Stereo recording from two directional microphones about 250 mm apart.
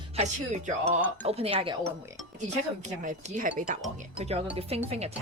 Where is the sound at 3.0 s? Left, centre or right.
Right.